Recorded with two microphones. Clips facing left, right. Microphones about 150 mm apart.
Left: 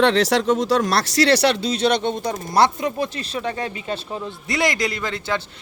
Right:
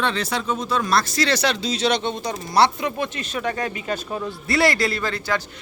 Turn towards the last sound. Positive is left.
turn(degrees=20)  # may be behind; listen again after turning